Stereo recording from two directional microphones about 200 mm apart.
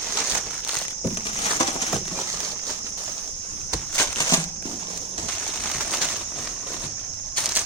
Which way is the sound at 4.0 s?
15° left (ahead or behind).